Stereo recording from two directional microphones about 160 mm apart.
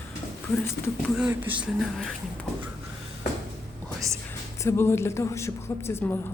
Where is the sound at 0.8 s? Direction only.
75° left (ahead or behind).